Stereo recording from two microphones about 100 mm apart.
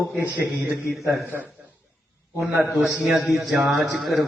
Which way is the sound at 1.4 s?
15° right (ahead or behind).